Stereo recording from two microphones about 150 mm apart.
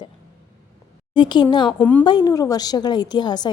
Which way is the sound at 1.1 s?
30° left (ahead or behind).